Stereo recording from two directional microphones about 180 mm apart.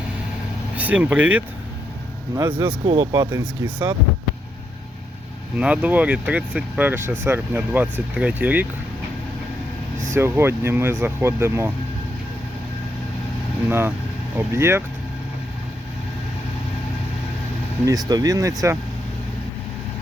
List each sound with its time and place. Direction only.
0.8 s speech: 10° right (ahead or behind)
2.8 s speech: 30° right (ahead or behind)
3.3 s speech: 10° right (ahead or behind)
5.5 s speech: 5° right (ahead or behind)
10.2 s speech: 10° right (ahead or behind)
13.7 s speech: 15° right (ahead or behind)
17.8 s speech: 20° right (ahead or behind)